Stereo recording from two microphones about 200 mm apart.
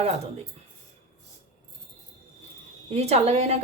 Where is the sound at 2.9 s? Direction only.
30° right (ahead or behind).